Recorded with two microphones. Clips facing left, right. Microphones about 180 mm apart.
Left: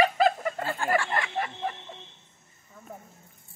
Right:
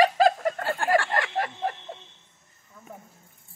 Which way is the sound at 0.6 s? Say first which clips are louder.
Right 3 dB; 60° right (ahead or behind).